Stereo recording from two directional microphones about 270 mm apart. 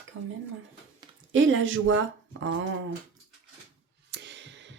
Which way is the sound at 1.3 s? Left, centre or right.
Right.